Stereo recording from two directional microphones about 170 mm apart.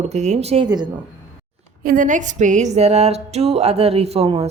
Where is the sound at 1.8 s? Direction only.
50° right (ahead or behind).